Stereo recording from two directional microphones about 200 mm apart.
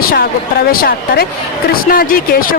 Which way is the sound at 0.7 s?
50° left (ahead or behind).